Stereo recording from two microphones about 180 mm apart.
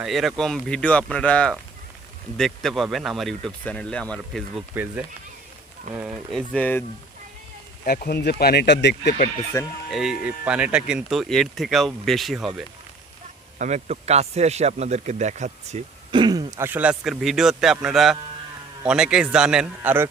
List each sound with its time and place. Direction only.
0.0 s speech: centre (ahead or behind)
4.7 s speech: 10° right (ahead or behind)
6.5 s speech: 10° left (ahead or behind)
7.9 s speech: 60° left (ahead or behind)
9.5 s speech: 15° left (ahead or behind)
9.9 s speech: 5° right (ahead or behind)
13.6 s speech: 40° right (ahead or behind)
16.1 s speech: 25° right (ahead or behind)